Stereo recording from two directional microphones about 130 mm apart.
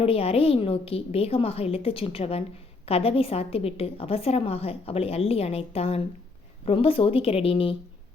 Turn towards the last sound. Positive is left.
turn(degrees=45)  # may be behind; listen again after turning